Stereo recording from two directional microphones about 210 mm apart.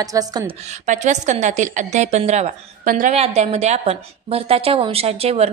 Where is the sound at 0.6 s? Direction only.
35° right (ahead or behind).